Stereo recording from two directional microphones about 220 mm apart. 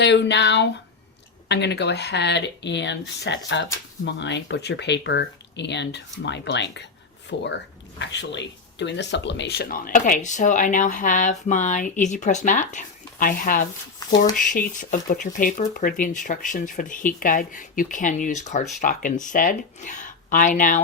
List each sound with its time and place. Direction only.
0.0 s speech: 50° left (ahead or behind)
14.0 s a sound: 15° left (ahead or behind)
14.3 s speech: 35° left (ahead or behind)